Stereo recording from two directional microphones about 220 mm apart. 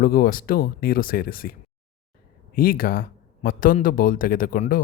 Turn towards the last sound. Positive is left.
turn(degrees=40)  # may be behind; listen again after turning